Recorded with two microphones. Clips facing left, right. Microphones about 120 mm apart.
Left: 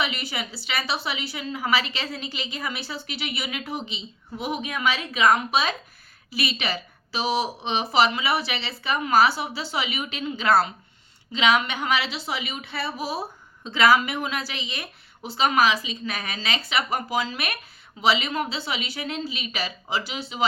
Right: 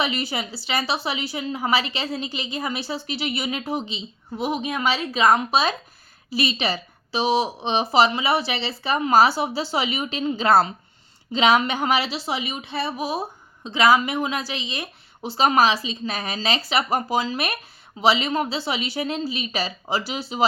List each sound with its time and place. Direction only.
0.0 s a woman's voice: 30° right (ahead or behind)